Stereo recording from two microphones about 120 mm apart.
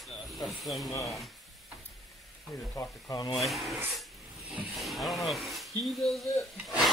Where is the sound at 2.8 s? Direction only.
30° left (ahead or behind).